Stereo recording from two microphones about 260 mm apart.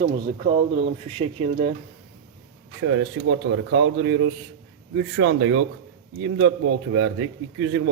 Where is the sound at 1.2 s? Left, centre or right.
Right.